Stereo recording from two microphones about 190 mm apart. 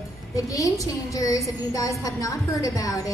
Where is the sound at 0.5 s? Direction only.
15° left (ahead or behind).